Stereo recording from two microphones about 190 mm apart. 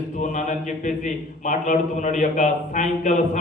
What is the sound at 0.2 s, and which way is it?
A man's voice, 40° left (ahead or behind).